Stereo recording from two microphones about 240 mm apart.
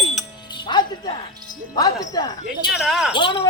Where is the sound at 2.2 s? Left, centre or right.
Centre.